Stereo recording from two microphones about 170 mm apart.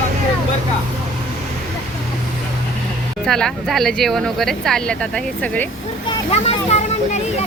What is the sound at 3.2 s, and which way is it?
Speech, 5° left (ahead or behind).